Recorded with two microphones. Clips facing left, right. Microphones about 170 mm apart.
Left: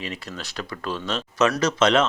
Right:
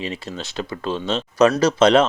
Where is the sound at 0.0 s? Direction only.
30° right (ahead or behind).